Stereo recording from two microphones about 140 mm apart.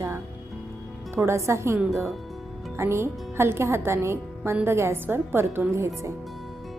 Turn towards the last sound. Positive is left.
turn(degrees=-20)  # may be behind; listen again after turning